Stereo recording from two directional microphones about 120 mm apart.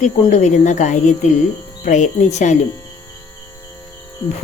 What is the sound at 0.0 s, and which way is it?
Speech, 75° left (ahead or behind).